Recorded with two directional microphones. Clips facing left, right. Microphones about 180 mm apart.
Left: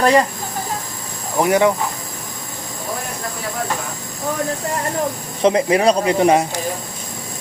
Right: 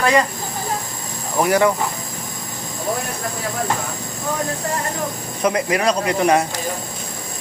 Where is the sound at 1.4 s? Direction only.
20° left (ahead or behind).